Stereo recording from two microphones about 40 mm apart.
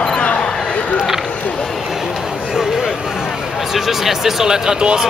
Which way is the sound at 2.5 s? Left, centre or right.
Centre.